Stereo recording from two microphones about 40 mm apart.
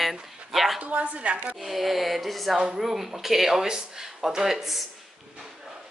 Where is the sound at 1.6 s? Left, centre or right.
Centre.